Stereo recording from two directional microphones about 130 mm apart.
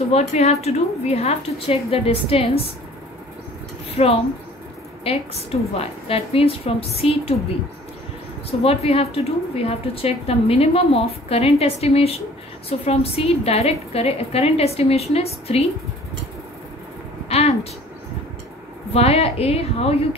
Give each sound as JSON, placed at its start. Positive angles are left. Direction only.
{"t": 0.1, "sound": "a woman's voice", "side_deg": 55}
{"t": 3.9, "sound": "a woman's voice", "side_deg": 50}
{"t": 8.5, "sound": "a woman's voice", "side_deg": 50}
{"t": 17.3, "sound": "a sound", "side_deg": 55}
{"t": 18.9, "sound": "a woman's voice", "side_deg": 50}